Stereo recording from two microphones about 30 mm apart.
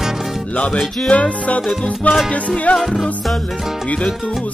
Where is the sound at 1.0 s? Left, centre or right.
Left.